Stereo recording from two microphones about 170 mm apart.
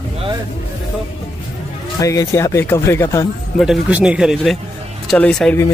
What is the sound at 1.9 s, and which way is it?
Speech, 20° left (ahead or behind).